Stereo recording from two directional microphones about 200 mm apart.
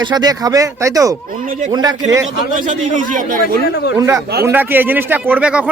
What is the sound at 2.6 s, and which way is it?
Speech, 40° right (ahead or behind).